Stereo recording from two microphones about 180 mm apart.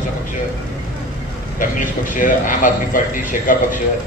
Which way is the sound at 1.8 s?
50° left (ahead or behind).